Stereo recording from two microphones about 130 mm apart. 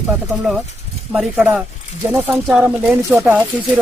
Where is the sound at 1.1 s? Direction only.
5° right (ahead or behind).